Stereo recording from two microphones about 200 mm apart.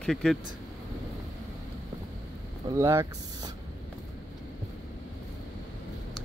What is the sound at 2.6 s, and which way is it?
Speech, 15° right (ahead or behind).